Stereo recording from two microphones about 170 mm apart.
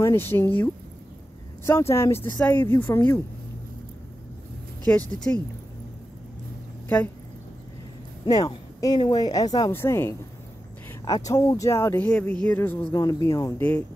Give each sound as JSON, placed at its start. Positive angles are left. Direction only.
{"t": 0.0, "sound": "speech", "side_deg": 15}
{"t": 1.7, "sound": "speech", "side_deg": 15}
{"t": 4.8, "sound": "speech", "side_deg": 10}
{"t": 8.3, "sound": "speech", "side_deg": 20}
{"t": 12.1, "sound": "speech", "side_deg": 5}